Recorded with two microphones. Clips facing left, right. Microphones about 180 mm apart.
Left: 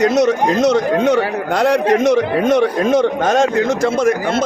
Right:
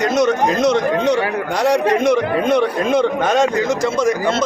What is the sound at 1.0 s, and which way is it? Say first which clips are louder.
Speech: left 2 dB; 55° left (ahead or behind).